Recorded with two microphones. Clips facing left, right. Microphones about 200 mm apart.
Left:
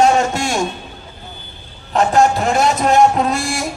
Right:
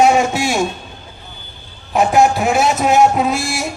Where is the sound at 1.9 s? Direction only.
10° right (ahead or behind).